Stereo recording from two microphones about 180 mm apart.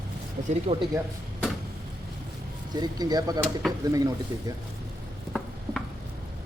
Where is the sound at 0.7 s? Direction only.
35° right (ahead or behind).